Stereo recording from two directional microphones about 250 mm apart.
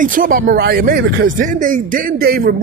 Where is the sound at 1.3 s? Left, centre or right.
Right.